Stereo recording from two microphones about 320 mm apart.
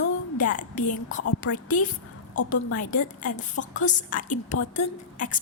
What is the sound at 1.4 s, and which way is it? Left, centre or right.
Speech, left.